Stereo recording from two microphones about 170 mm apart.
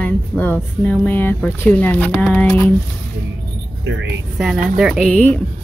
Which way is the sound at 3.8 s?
90° right.